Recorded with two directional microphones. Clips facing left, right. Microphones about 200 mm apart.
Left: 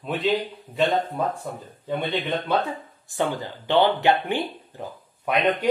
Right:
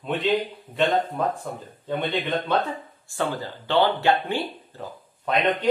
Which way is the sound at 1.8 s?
10° left (ahead or behind).